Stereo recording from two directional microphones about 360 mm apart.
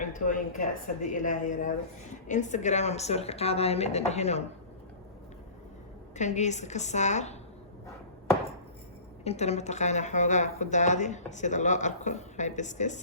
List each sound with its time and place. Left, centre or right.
0.0 s a woman's voice: left
6.1 s speech: centre
9.2 s speech: centre